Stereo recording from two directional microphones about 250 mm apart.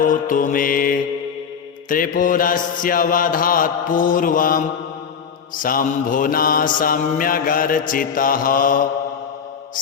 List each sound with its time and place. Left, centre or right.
0.0 s mantra: left